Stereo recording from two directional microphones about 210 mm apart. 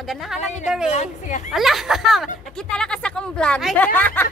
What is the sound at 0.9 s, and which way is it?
Speech, 35° left (ahead or behind).